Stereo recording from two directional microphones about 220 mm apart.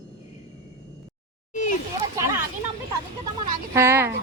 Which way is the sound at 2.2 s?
15° right (ahead or behind).